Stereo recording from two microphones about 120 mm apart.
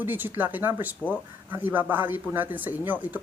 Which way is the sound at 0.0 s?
15° right (ahead or behind).